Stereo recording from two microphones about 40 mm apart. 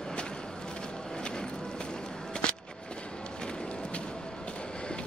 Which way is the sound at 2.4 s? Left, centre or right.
Left.